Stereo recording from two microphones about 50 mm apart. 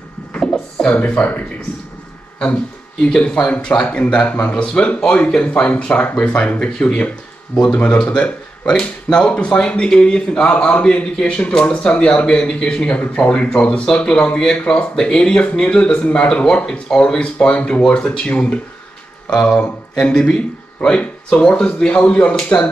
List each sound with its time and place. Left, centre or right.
0.9 s speech: left
3.1 s speech: centre